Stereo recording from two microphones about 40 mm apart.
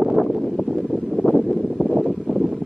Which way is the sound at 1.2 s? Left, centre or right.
Centre.